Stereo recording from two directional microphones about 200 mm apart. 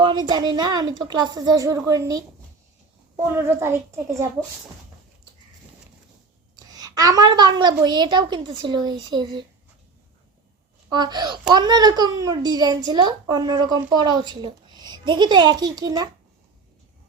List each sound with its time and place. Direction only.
0.0 s a child's voice: 20° right (ahead or behind)
3.3 s a child's voice: 10° right (ahead or behind)
6.7 s a child's voice: 20° right (ahead or behind)
10.9 s a child's voice: 20° right (ahead or behind)